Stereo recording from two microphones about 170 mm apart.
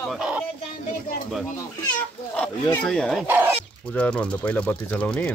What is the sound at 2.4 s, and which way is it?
Speech, 5° left (ahead or behind).